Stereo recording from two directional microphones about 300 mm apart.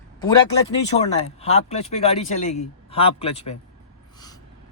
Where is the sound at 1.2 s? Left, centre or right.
Left.